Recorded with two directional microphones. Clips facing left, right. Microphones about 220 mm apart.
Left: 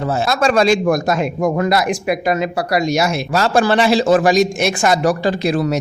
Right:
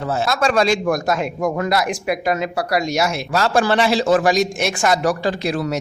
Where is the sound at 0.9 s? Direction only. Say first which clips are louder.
Left 3 dB; 10° left (ahead or behind).